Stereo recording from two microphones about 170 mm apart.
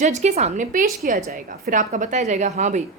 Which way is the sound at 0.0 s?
45° right (ahead or behind).